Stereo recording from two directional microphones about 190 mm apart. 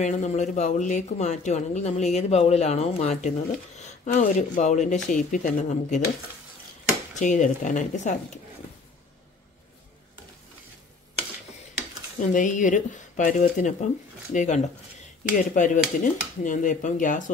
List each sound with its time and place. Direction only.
0.0 s speech: 40° left (ahead or behind)
7.2 s speech: 40° left (ahead or behind)
12.2 s speech: 40° left (ahead or behind)